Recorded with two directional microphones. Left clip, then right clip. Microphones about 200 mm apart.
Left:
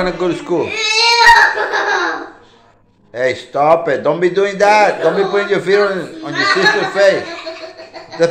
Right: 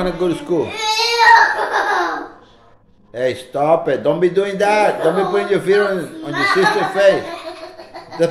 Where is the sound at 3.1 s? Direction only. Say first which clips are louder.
Left 3 dB; 15° right (ahead or behind).